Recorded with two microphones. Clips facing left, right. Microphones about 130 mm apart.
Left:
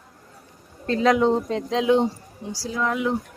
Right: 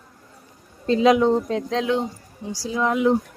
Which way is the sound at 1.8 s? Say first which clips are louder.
Left 6 dB; 20° left (ahead or behind).